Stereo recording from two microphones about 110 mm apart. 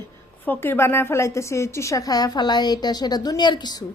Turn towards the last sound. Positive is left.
turn(degrees=40)  # may be behind; listen again after turning